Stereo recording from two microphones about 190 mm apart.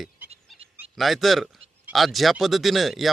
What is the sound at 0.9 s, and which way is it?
Speech, centre (ahead or behind).